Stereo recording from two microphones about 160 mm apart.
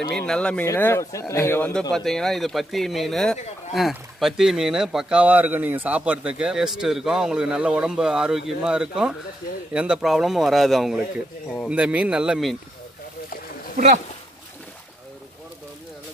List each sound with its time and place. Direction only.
0.1 s speech: 5° left (ahead or behind)
13.7 s speech: 50° right (ahead or behind)